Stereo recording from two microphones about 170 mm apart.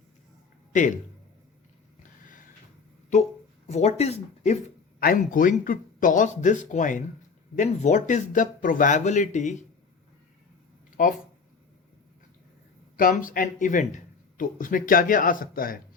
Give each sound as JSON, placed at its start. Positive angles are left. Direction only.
{"t": 0.7, "sound": "speech", "side_deg": 45}
{"t": 3.1, "sound": "speech", "side_deg": 45}
{"t": 4.9, "sound": "speech", "side_deg": 55}
{"t": 11.0, "sound": "speech", "side_deg": 50}
{"t": 13.0, "sound": "speech", "side_deg": 55}